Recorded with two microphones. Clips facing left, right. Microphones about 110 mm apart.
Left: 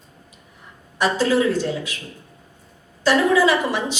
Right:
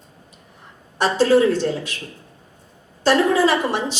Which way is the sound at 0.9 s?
30° right (ahead or behind).